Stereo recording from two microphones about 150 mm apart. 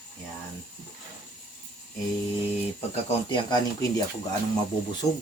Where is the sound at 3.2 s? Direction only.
25° left (ahead or behind).